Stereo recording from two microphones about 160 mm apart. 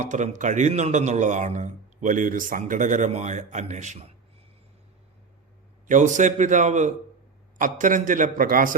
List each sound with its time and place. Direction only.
0.0 s speech: 50° right (ahead or behind)
5.9 s a man's voice: 50° right (ahead or behind)